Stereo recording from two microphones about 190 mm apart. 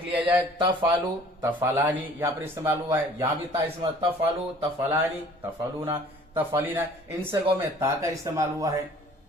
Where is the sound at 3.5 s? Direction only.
30° right (ahead or behind).